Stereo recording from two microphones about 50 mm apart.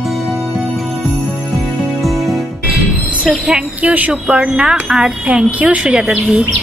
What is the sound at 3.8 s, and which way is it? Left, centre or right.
Speech, right.